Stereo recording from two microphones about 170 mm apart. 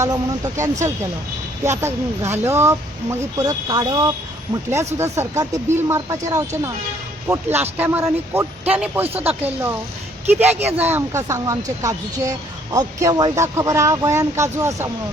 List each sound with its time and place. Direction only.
0.0 s speech: 20° right (ahead or behind)
10.8 s speech: 10° right (ahead or behind)